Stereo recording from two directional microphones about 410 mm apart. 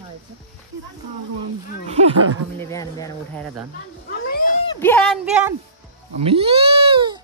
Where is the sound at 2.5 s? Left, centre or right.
Centre.